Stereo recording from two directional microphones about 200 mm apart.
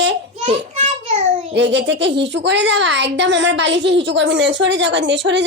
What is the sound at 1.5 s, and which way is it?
Speech, 60° right (ahead or behind).